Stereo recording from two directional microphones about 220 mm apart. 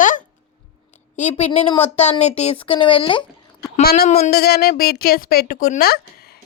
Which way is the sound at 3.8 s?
45° left (ahead or behind).